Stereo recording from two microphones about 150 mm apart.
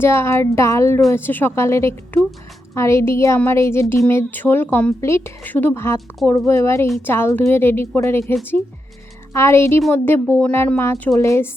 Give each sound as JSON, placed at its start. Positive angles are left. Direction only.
{"t": 0.0, "sound": "a woman's voice", "side_deg": 20}
{"t": 9.3, "sound": "a woman's voice", "side_deg": 20}